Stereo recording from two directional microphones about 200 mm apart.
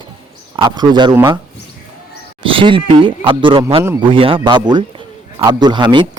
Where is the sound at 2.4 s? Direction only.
25° right (ahead or behind).